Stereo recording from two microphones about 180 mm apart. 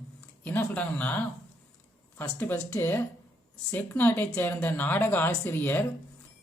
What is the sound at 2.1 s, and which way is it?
Speech, 10° left (ahead or behind).